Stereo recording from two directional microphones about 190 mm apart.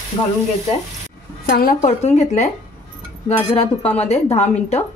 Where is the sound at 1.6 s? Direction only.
45° left (ahead or behind).